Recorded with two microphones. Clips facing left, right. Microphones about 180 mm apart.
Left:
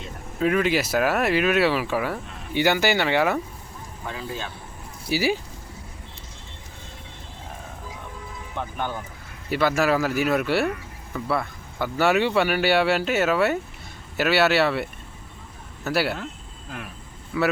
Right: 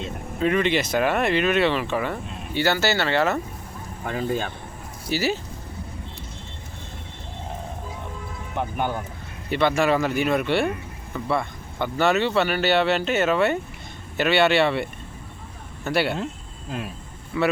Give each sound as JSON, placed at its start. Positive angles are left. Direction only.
{"t": 0.3, "sound": "speech", "side_deg": 5}
{"t": 2.2, "sound": "a sound", "side_deg": -20}
{"t": 2.5, "sound": "speech", "side_deg": 15}
{"t": 4.0, "sound": "speech", "side_deg": -50}
{"t": 5.0, "sound": "speech", "side_deg": 10}
{"t": 8.5, "sound": "speech", "side_deg": -15}
{"t": 9.5, "sound": "speech", "side_deg": 5}
{"t": 16.1, "sound": "a sound", "side_deg": -20}
{"t": 17.3, "sound": "speech", "side_deg": 0}